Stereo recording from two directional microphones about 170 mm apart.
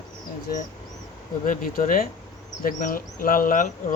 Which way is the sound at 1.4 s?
55° left (ahead or behind).